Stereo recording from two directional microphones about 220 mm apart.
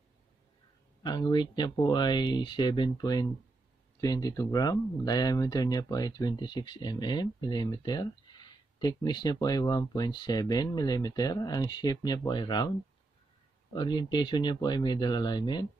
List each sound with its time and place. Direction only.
1.0 s speech: 20° left (ahead or behind)
13.7 s speech: 20° left (ahead or behind)